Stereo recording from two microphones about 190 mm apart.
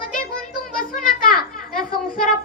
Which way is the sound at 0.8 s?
45° left (ahead or behind).